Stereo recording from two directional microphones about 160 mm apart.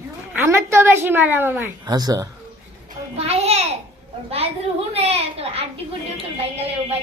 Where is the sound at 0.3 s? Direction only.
15° right (ahead or behind).